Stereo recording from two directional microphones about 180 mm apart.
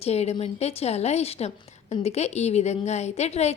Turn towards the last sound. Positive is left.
turn(degrees=35)  # may be behind; listen again after turning